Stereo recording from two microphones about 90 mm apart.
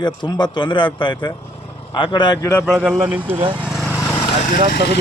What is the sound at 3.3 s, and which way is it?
Speech, 65° right (ahead or behind).